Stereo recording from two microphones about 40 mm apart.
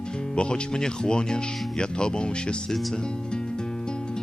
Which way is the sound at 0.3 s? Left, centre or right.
Left.